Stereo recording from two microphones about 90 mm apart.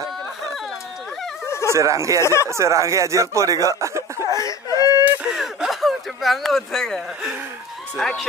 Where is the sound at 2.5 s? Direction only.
35° right (ahead or behind).